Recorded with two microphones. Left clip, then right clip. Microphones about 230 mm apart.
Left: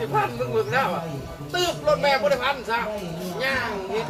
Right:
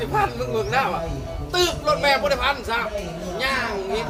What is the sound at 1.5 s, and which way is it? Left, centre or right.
Speech, right.